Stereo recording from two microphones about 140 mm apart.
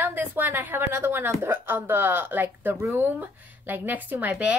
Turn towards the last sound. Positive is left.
turn(degrees=-10)  # may be behind; listen again after turning